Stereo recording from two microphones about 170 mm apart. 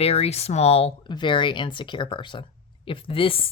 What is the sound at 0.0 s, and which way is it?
Speech, 35° left (ahead or behind).